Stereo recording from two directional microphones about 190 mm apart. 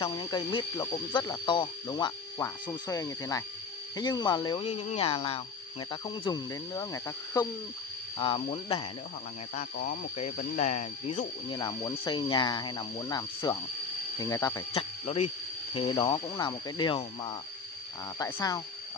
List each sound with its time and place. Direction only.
0.0 s speech: 25° left (ahead or behind)
10.3 s speech: 40° left (ahead or behind)
11.5 s speech: 20° left (ahead or behind)
14.7 s speech: 35° left (ahead or behind); by 18.6 s 20° left (ahead or behind)